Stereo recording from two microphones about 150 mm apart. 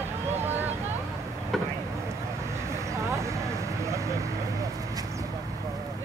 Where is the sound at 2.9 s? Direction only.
20° right (ahead or behind).